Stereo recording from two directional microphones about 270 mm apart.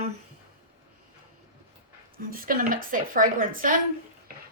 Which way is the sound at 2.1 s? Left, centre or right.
Right.